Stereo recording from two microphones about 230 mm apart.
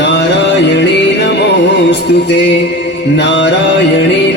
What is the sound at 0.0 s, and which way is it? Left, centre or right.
Music, left.